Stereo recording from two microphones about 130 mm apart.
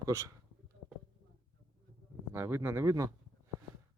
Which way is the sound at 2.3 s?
15° right (ahead or behind).